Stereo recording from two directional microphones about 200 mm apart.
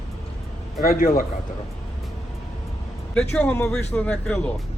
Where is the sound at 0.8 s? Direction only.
45° left (ahead or behind).